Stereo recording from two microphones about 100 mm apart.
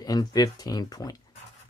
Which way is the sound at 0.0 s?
40° left (ahead or behind).